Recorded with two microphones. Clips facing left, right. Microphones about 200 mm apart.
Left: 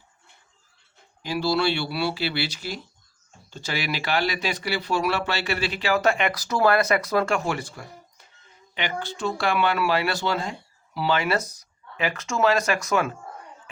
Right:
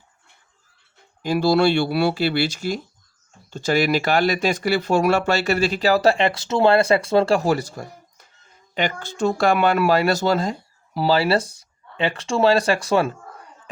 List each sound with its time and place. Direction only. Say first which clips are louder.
1.2 s speech: right 6 dB; 50° right (ahead or behind); by 13.1 s 30° right (ahead or behind)